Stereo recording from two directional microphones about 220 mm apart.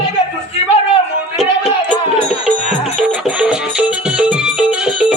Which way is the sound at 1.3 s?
Centre (ahead or behind).